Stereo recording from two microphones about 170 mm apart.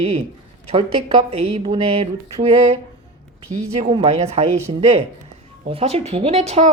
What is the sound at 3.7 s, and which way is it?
Speech, 35° right (ahead or behind).